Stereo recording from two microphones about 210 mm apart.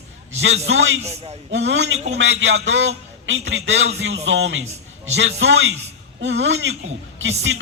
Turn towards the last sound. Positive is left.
turn(degrees=-65)  # may be behind; listen again after turning